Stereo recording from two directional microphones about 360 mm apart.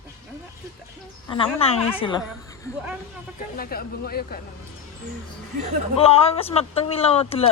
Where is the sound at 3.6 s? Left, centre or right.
Left.